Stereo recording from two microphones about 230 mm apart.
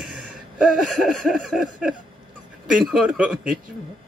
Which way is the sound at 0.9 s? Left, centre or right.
Centre.